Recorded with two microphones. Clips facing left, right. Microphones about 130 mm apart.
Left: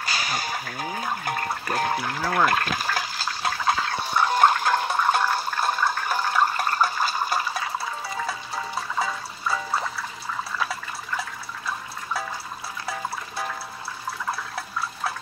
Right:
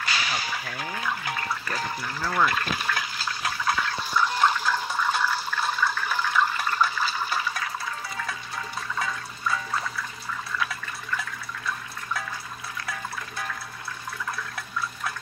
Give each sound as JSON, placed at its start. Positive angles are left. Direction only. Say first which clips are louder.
{"t": 0.0, "sound": "a sound", "louder": "left 1 dB", "side_deg": 40}
{"t": 0.9, "sound": "speech", "louder": "left 2 dB", "side_deg": 45}
{"t": 2.8, "sound": "toilet flush", "louder": "left 2 dB", "side_deg": 35}
{"t": 3.9, "sound": "toilet flush", "louder": "left 3 dB", "side_deg": 60}
{"t": 7.6, "sound": "toilet flush", "louder": "left 3 dB", "side_deg": 25}
{"t": 10.6, "sound": "water", "louder": "left 2 dB", "side_deg": 35}
{"t": 14.3, "sound": "water", "louder": "left 2 dB", "side_deg": 35}